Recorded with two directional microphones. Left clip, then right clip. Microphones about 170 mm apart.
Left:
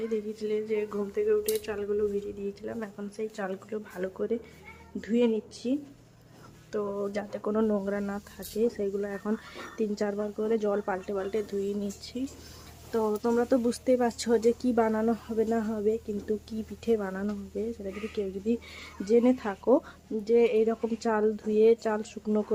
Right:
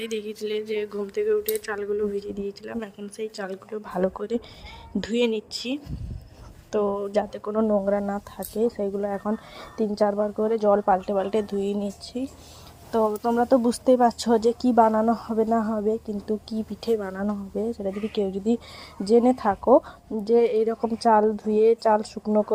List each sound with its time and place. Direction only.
0.0 s a sound: 65° right (ahead or behind)
1.1 s speech: 55° right (ahead or behind)
4.9 s a sound: 60° right (ahead or behind)
6.7 s speech: 30° right (ahead or behind)
12.9 s speech: 20° right (ahead or behind)
14.8 s speech: 10° right (ahead or behind)
16.2 s speech: 30° right (ahead or behind)
18.1 s speech: 35° right (ahead or behind)